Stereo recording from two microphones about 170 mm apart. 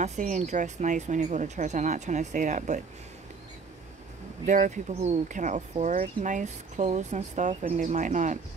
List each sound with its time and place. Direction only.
0.0 s speech: 45° right (ahead or behind)
4.5 s speech: 45° right (ahead or behind)